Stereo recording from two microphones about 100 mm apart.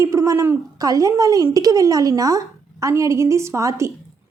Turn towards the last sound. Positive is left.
turn(degrees=-30)  # may be behind; listen again after turning